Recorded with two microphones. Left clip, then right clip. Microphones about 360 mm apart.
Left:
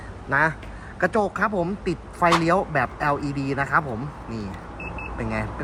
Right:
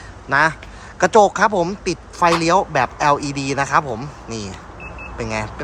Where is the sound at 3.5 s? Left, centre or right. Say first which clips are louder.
Right 5 dB; centre.